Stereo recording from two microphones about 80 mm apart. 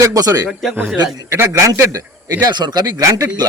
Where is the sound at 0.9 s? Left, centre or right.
Right.